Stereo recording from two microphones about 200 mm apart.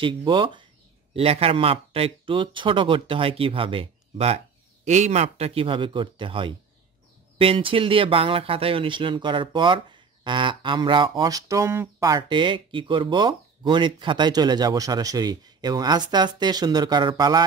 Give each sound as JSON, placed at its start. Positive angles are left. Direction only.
{"t": 0.0, "sound": "speech", "side_deg": -25}